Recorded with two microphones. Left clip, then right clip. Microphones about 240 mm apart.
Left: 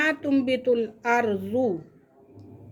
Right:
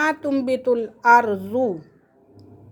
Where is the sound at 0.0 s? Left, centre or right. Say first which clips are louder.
Right 2 dB; centre.